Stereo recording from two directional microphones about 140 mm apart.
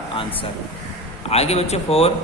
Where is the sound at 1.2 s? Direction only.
50° left (ahead or behind).